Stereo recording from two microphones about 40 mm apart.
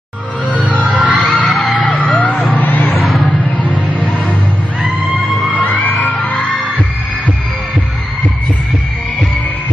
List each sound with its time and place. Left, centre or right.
0.5 s music: left
0.9 s music: right
1.2 s music: left
1.8 s vehicle: left
2.5 s a sound: left
3.3 s music: left